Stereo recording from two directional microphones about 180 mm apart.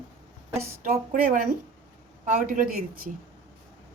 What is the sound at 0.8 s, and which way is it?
Speech, 50° right (ahead or behind).